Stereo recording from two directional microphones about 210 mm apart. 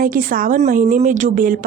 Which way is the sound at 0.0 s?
40° right (ahead or behind).